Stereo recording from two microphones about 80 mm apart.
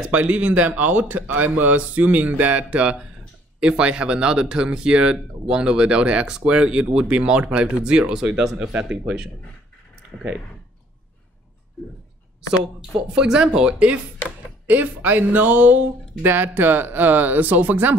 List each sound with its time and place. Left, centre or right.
0.0 s speech: centre
11.8 s a sound: centre
12.9 s speech: centre